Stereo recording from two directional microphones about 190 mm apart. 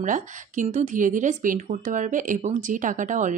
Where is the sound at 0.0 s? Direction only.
40° right (ahead or behind).